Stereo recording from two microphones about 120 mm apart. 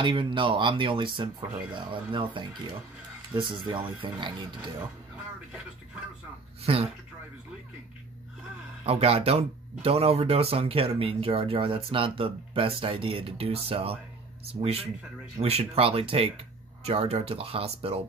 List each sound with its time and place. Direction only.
0.0 s speech: 45° right (ahead or behind)
6.6 s speech: 55° right (ahead or behind)
8.8 s speech: 55° right (ahead or behind)